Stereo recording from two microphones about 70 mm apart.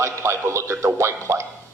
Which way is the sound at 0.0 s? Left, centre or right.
Right.